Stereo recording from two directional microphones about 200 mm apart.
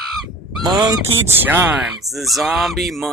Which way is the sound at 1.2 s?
10° right (ahead or behind).